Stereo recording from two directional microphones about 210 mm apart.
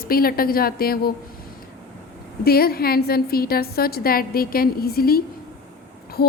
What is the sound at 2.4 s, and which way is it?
A woman's voice, 45° left (ahead or behind).